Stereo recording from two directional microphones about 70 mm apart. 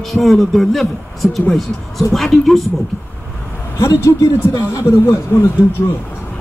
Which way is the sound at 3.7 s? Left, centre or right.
Left.